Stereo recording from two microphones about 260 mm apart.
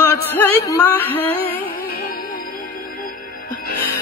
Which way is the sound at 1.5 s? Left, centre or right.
Left.